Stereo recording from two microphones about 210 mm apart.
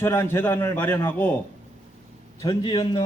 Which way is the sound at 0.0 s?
10° left (ahead or behind).